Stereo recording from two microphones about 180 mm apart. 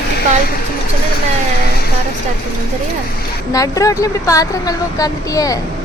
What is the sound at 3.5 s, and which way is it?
Speech, 20° left (ahead or behind).